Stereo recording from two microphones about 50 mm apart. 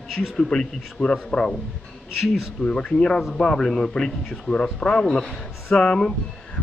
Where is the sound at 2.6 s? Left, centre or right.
Centre.